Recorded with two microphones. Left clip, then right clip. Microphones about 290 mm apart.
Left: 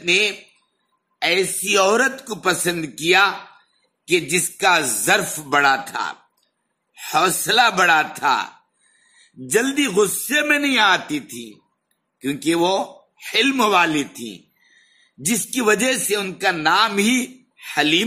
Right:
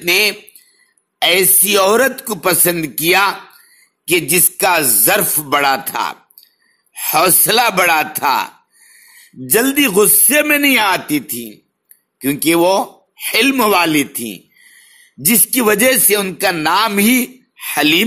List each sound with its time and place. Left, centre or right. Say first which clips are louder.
0.0 s speech: right 4 dB; centre
1.2 s music: right 6 dB; right
6.9 s speech: right 5 dB; centre
7.4 s music: right 3 dB; centre
9.5 s music: right 5 dB; centre